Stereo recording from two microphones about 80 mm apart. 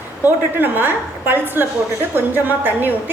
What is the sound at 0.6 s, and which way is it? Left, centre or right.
A woman's voice, right.